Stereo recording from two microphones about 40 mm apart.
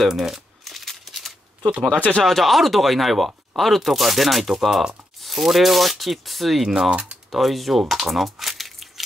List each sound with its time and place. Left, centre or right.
0.0 s crumpling: centre
1.6 s speech: right
2.2 s speech: centre
6.9 s speech: right
7.2 s speech: centre
7.9 s a sound: centre